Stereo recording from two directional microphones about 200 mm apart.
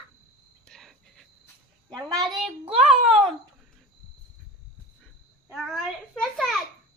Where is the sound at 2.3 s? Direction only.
25° right (ahead or behind).